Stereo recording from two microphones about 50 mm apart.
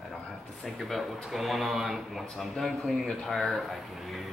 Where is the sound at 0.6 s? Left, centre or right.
Centre.